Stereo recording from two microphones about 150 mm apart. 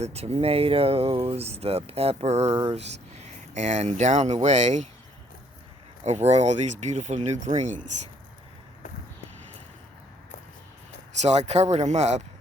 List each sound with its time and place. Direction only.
0.0 s speech: 45° right (ahead or behind)
6.0 s speech: 50° right (ahead or behind)
11.2 s speech: 45° right (ahead or behind)